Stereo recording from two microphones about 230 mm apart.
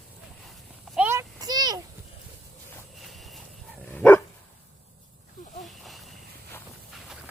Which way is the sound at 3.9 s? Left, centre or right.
Centre.